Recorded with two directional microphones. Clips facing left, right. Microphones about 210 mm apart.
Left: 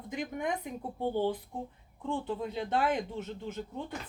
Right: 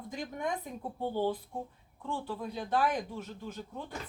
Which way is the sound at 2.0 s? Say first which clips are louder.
Left 3 dB; 20° left (ahead or behind).